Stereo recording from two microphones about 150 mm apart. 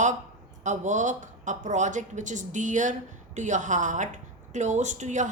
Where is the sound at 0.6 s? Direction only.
55° right (ahead or behind).